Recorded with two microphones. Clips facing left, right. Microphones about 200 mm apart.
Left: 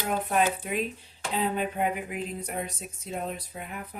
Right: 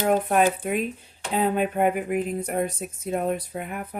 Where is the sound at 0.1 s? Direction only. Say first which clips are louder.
Right 4 dB; 50° right (ahead or behind).